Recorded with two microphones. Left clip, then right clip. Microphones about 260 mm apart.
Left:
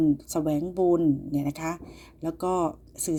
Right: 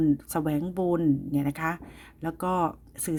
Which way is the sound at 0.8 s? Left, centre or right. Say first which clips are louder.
Left 4 dB; right.